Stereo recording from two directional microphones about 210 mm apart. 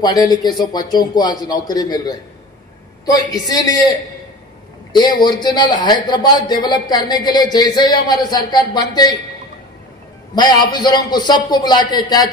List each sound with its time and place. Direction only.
0.0 s a man's voice: 20° left (ahead or behind)
4.9 s a man's voice: 20° left (ahead or behind)
10.3 s a man's voice: 20° left (ahead or behind)